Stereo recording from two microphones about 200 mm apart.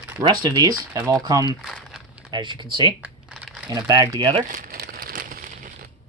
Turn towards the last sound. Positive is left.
turn(degrees=-50)  # may be behind; listen again after turning